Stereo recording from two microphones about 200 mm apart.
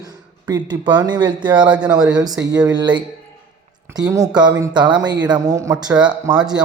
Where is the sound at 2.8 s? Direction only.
20° right (ahead or behind).